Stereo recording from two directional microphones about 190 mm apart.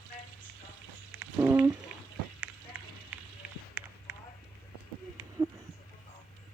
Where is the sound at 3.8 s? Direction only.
10° right (ahead or behind).